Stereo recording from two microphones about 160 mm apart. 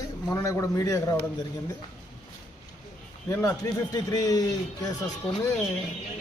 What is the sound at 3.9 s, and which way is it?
Speech, 20° left (ahead or behind).